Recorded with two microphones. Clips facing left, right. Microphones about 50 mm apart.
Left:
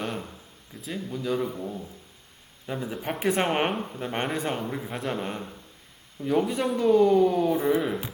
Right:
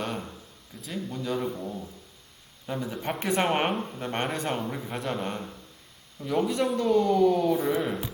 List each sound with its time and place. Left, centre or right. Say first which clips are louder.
0.0 s a sound: even; centre
0.9 s speech: left 2 dB; centre
2.6 s speech: even; centre
6.7 s speech: left 4 dB; centre
7.8 s speech: left 1 dB; centre